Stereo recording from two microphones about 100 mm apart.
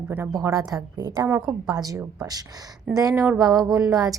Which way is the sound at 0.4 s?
35° right (ahead or behind).